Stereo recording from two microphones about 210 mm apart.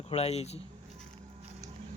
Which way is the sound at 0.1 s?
30° left (ahead or behind).